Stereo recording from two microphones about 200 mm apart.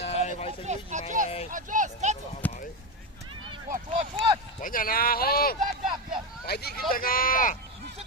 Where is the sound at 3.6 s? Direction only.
40° right (ahead or behind).